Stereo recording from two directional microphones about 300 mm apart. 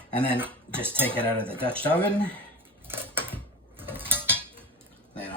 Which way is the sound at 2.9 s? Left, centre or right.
Centre.